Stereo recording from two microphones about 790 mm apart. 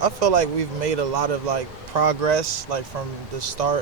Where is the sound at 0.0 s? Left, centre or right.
Right.